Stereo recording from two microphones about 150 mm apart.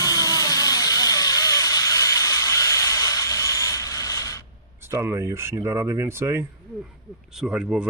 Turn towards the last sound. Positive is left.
turn(degrees=-5)  # may be behind; listen again after turning